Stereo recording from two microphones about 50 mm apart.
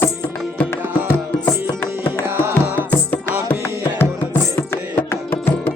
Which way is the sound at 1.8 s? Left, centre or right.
Left.